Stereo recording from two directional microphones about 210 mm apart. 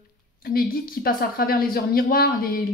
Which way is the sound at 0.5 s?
45° left (ahead or behind).